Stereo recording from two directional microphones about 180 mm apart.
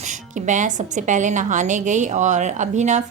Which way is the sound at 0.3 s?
45° right (ahead or behind).